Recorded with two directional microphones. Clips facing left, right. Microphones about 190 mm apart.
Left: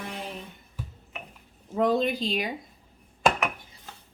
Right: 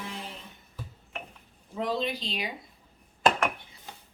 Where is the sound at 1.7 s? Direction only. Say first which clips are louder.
Left 6 dB; 50° left (ahead or behind).